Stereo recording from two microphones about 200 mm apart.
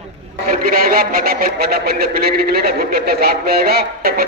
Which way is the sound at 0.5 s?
45° right (ahead or behind).